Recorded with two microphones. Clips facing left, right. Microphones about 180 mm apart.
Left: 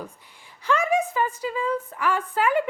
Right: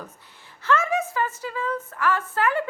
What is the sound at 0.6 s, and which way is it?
Speech, 15° left (ahead or behind).